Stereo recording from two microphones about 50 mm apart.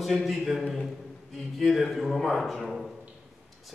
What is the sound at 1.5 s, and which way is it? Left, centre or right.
A man's voice, centre.